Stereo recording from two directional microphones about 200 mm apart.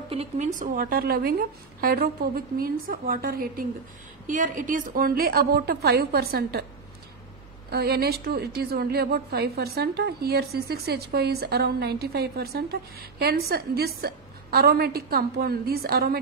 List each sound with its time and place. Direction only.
0.1 s a woman's voice: 30° right (ahead or behind); by 6.6 s 55° right (ahead or behind)
7.7 s a woman's voice: 50° right (ahead or behind)